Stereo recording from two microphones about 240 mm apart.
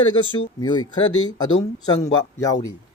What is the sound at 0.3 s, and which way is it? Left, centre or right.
Speech, centre.